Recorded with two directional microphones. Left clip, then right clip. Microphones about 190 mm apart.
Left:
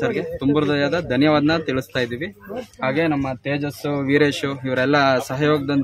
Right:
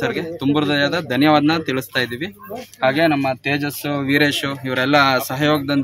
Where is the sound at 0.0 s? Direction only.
10° left (ahead or behind).